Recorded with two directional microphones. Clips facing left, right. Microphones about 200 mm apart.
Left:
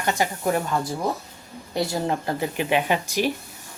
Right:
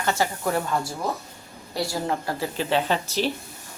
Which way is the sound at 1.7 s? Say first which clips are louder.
Left 2 dB; 20° left (ahead or behind).